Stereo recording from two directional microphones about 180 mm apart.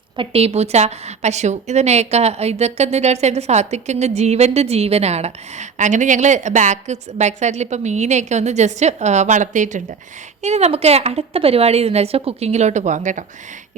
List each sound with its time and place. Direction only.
0.2 s a woman's voice: 35° right (ahead or behind)